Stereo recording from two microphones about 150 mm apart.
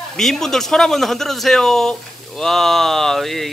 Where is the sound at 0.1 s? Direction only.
5° left (ahead or behind).